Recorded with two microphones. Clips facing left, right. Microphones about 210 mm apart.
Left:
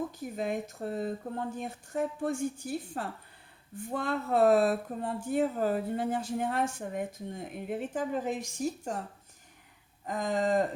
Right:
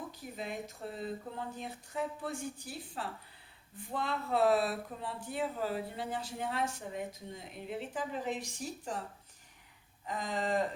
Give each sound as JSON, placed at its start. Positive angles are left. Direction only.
{"t": 0.2, "sound": "speech", "side_deg": 50}
{"t": 10.1, "sound": "speech", "side_deg": 45}